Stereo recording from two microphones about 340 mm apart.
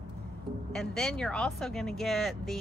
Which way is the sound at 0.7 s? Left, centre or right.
Centre.